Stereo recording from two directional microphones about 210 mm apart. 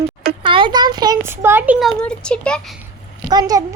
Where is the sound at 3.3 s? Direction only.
20° right (ahead or behind).